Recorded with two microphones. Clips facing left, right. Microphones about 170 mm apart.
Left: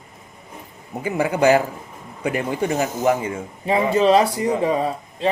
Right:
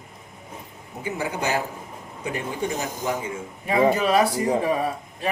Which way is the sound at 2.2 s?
75° left (ahead or behind).